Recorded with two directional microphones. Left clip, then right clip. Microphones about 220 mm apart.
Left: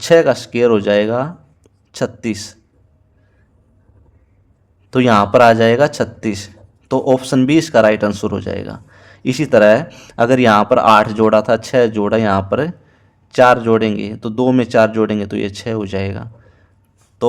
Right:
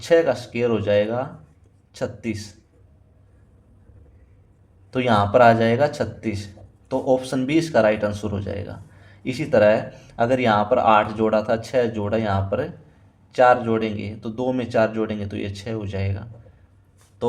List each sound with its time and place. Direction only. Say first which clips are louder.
0.0 s a man's voice: left 7 dB; 40° left (ahead or behind)
4.9 s a man's voice: left 7 dB; 40° left (ahead or behind)